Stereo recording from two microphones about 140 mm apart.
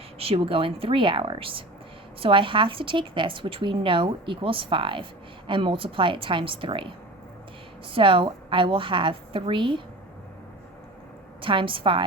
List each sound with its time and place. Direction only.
0.2 s a woman's voice: 40° right (ahead or behind)
7.9 s a woman's voice: 40° right (ahead or behind)
11.3 s a woman's voice: 40° right (ahead or behind)